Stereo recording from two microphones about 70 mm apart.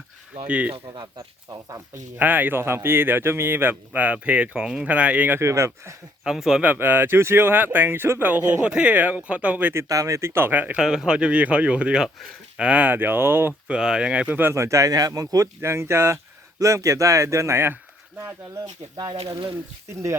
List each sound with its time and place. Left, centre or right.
0.4 s a man's voice: centre
2.1 s a man's voice: right
5.4 s speech: right
6.2 s speech: centre
6.6 s a man's voice: right
8.6 s a man's voice: centre
9.9 s speech: right
10.2 s speech: right
10.8 s a man's voice: centre; by 13.5 s right
13.7 s speech: centre
14.5 s speech: right
15.6 s speech: right
18.9 s speech: right